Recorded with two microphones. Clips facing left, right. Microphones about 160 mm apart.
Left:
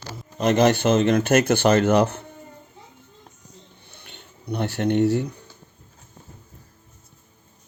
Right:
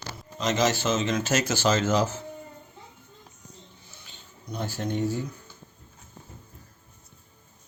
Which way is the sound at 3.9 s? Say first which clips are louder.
Left 4 dB; 60° left (ahead or behind).